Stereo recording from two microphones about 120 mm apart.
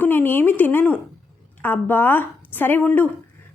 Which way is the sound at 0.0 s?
15° left (ahead or behind).